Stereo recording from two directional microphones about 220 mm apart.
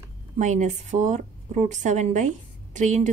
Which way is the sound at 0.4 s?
35° right (ahead or behind).